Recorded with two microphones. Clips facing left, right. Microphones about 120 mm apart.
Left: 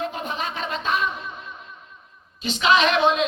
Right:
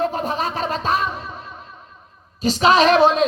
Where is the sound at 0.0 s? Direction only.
40° right (ahead or behind).